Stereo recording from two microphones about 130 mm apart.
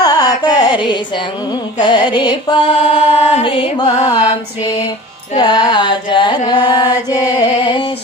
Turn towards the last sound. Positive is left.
turn(degrees=35)  # may be behind; listen again after turning